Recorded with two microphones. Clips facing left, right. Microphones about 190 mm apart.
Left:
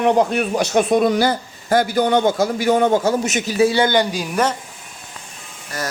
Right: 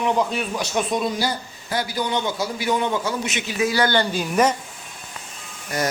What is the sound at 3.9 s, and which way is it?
Speech, 15° left (ahead or behind).